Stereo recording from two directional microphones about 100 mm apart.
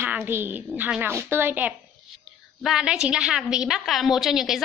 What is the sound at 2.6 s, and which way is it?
A woman's voice, 5° right (ahead or behind).